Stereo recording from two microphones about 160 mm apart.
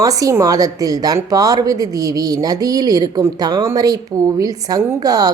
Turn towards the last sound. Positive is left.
turn(degrees=-25)  # may be behind; listen again after turning